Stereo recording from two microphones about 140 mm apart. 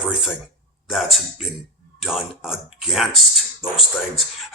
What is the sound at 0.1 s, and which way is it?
Speech, centre (ahead or behind).